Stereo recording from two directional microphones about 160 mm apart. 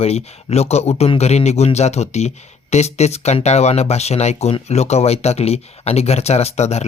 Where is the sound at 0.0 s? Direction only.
40° left (ahead or behind).